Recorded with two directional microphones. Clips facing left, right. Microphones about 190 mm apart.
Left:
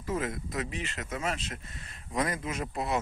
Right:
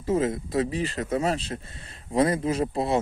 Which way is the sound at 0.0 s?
25° right (ahead or behind).